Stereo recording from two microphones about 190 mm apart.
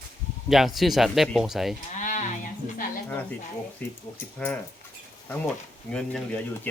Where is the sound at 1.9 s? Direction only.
40° left (ahead or behind).